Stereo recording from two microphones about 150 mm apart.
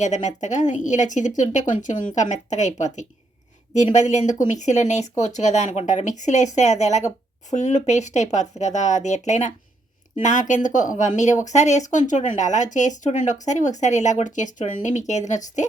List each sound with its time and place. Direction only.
0.0 s speech: 55° left (ahead or behind)